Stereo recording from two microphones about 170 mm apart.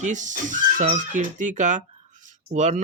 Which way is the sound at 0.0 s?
45° right (ahead or behind).